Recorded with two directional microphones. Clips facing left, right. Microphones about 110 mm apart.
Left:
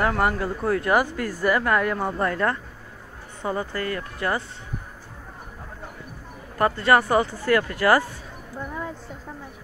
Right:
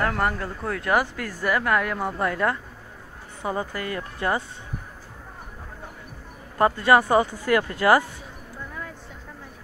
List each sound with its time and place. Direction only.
0.0 s speech: 5° left (ahead or behind); by 4.5 s 20° right (ahead or behind)
6.6 s speech: 15° right (ahead or behind)